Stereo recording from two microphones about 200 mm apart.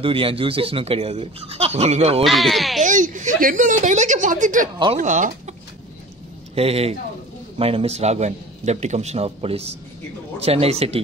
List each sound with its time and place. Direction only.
0.0 s speech: 25° right (ahead or behind)
2.2 s speech: centre (ahead or behind)
2.8 s a man's voice: 40° right (ahead or behind)
6.5 s a man's voice: 30° right (ahead or behind)